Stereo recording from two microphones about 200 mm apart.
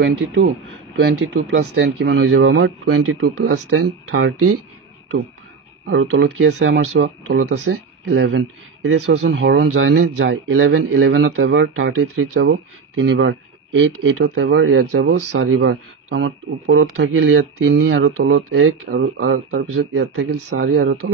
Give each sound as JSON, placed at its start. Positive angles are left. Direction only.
{"t": 0.0, "sound": "speech", "side_deg": -70}
{"t": 5.9, "sound": "speech", "side_deg": -60}
{"t": 21.0, "sound": "speech", "side_deg": -80}